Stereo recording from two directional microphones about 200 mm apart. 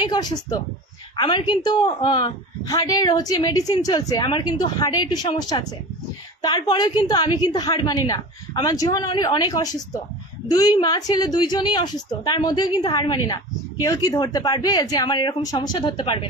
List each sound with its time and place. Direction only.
0.0 s a woman's voice: 20° left (ahead or behind)